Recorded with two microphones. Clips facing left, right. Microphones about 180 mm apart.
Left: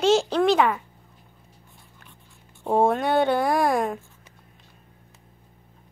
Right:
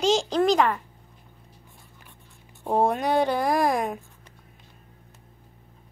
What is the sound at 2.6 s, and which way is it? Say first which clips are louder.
A child's voice: left 2 dB; centre (ahead or behind).